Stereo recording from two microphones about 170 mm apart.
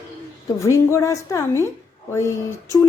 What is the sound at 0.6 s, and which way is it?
Speech, 15° left (ahead or behind).